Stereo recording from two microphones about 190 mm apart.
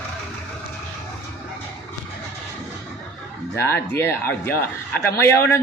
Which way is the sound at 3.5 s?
10° left (ahead or behind).